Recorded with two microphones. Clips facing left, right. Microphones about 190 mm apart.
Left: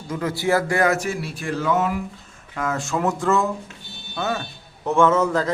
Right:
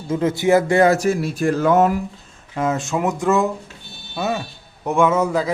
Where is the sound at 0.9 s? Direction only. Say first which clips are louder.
Right 7 dB; 40° right (ahead or behind).